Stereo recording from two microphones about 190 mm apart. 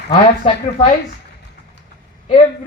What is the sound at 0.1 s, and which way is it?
Speech, 35° left (ahead or behind).